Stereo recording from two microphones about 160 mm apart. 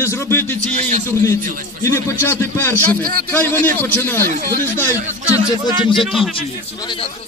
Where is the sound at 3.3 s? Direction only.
10° left (ahead or behind).